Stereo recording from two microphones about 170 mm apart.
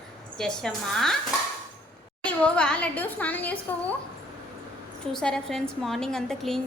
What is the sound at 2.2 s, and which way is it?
A woman's voice, 5° left (ahead or behind).